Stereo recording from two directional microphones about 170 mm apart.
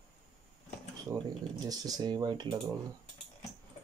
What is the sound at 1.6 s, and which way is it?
Speech, 20° right (ahead or behind).